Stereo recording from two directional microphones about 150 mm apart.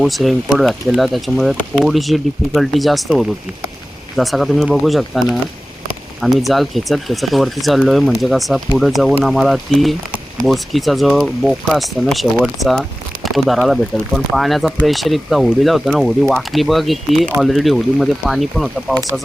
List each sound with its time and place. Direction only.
0.0 s speech: centre (ahead or behind)